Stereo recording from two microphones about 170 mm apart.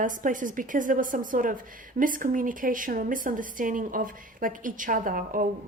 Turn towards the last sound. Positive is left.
turn(degrees=-55)  # may be behind; listen again after turning